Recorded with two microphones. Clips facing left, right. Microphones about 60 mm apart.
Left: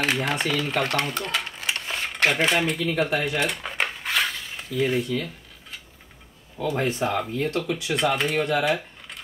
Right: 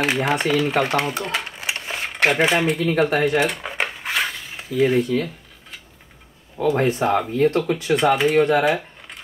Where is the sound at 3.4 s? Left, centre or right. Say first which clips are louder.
Right 2 dB; centre.